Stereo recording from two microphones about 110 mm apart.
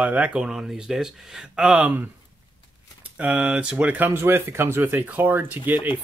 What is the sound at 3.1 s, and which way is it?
Speech, 10° right (ahead or behind).